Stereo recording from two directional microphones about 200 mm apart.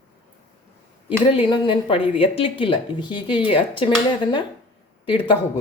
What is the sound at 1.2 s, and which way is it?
Speech, 25° left (ahead or behind).